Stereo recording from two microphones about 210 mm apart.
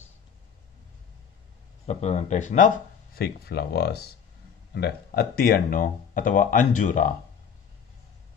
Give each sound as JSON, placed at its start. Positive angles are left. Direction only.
{"t": 1.9, "sound": "speech", "side_deg": 30}
{"t": 3.2, "sound": "speech", "side_deg": 50}